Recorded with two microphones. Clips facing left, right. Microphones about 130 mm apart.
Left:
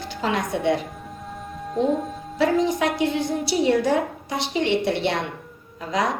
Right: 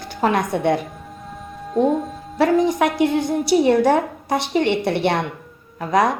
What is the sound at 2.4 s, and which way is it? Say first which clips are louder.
A woman's voice: right 4 dB; 55° right (ahead or behind).